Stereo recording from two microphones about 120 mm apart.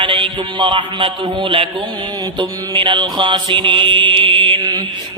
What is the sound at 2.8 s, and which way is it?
Mantra, 40° right (ahead or behind).